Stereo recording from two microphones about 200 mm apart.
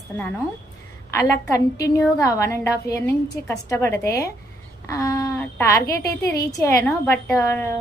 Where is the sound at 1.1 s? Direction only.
15° left (ahead or behind).